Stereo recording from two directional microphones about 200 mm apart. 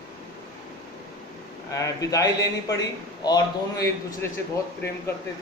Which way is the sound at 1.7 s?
15° left (ahead or behind).